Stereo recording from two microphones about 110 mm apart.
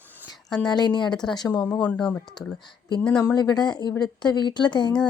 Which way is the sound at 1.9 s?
15° left (ahead or behind).